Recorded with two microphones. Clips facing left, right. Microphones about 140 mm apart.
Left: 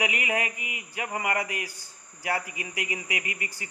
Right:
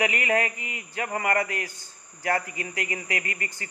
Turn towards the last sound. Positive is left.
turn(degrees=15)  # may be behind; listen again after turning